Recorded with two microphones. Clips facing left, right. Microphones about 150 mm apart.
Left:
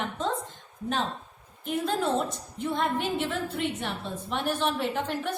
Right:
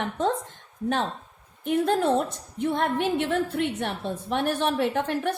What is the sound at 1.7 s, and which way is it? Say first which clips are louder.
A woman's voice: right 5 dB; 60° right (ahead or behind).